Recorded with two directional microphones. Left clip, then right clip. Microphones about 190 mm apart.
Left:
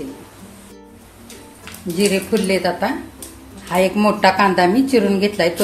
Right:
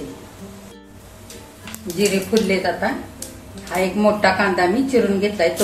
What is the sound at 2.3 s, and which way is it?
Speech, 55° left (ahead or behind).